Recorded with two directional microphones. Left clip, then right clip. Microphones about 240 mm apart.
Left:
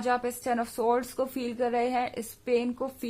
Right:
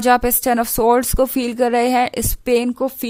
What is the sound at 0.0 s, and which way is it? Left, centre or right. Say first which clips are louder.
Speech: right 13 dB; right.